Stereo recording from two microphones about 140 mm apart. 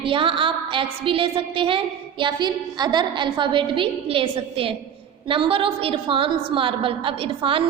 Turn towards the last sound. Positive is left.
turn(degrees=-40)  # may be behind; listen again after turning